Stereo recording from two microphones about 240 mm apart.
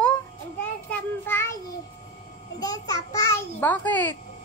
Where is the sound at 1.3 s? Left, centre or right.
Centre.